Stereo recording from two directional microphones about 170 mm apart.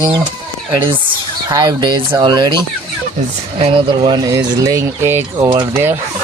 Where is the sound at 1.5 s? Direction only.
20° right (ahead or behind).